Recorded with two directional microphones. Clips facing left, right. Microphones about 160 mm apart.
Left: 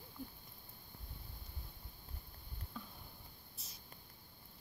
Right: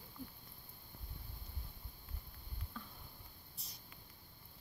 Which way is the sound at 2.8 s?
10° left (ahead or behind).